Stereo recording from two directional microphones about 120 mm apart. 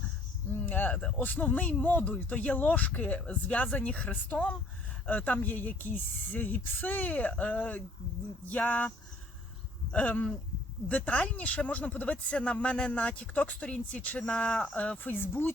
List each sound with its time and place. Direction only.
0.5 s speech: 15° left (ahead or behind)
9.9 s speech: 10° left (ahead or behind)